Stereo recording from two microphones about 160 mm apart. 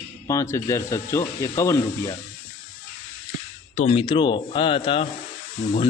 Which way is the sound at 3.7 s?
40° left (ahead or behind).